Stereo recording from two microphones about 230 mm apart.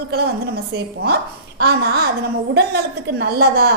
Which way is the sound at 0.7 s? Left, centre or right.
Right.